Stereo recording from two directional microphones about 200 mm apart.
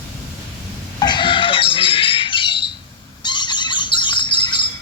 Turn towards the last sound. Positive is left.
turn(degrees=25)  # may be behind; listen again after turning